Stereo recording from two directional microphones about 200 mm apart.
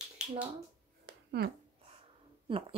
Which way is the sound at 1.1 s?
50° right (ahead or behind).